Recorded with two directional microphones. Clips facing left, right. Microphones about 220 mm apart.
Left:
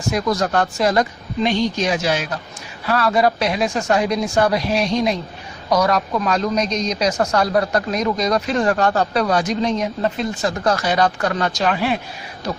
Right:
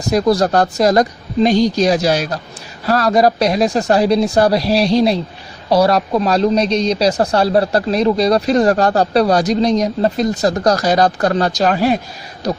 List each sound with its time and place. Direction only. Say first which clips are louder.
0.0 s speech: right 6 dB; 35° right (ahead or behind)